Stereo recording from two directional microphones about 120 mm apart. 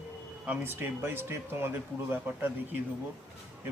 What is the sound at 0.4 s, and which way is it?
Speech, 15° right (ahead or behind).